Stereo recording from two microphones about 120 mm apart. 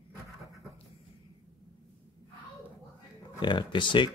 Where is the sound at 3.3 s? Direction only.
40° left (ahead or behind).